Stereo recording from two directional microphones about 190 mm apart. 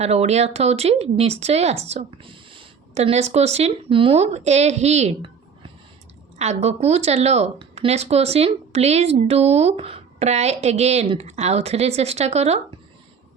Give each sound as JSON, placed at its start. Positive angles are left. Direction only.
{"t": 0.0, "sound": "speech", "side_deg": -35}